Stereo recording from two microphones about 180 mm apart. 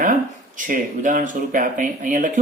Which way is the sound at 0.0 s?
45° right (ahead or behind).